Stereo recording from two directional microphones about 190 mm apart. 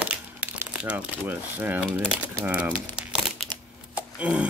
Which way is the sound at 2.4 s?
5° right (ahead or behind).